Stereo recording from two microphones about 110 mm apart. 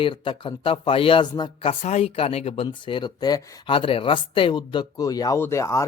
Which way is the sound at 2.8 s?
45° left (ahead or behind).